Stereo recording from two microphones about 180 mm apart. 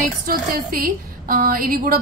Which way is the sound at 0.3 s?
50° right (ahead or behind).